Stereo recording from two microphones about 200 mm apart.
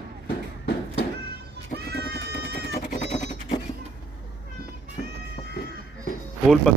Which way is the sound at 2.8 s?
35° left (ahead or behind).